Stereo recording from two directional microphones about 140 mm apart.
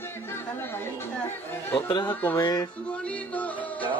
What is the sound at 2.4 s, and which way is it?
Speech, 25° left (ahead or behind).